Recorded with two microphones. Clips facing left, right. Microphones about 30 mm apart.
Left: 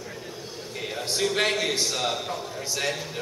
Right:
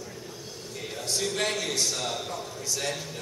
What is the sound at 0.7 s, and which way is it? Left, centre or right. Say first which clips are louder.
A man's voice: left 3 dB; left.